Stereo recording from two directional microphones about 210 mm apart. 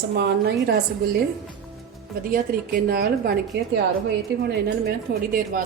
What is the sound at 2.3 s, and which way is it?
Speech, 45° right (ahead or behind).